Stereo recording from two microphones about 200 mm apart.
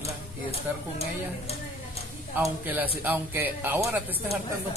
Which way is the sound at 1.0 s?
30° left (ahead or behind).